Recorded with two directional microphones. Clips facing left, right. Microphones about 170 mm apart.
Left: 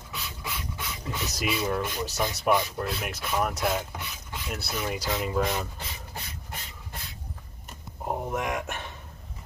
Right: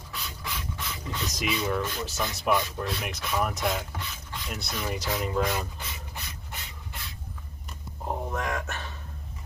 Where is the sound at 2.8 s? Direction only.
Centre (ahead or behind).